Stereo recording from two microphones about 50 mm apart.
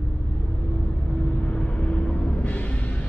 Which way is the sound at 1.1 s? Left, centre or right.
Centre.